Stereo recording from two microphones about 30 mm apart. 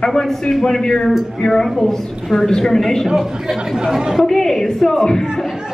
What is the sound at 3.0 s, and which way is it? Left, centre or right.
Speech, centre.